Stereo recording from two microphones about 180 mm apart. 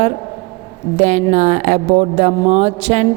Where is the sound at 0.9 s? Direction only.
40° right (ahead or behind).